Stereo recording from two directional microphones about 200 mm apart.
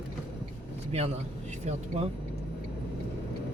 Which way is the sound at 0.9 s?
30° right (ahead or behind).